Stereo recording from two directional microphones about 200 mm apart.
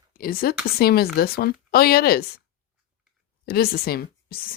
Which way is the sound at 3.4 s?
50° left (ahead or behind).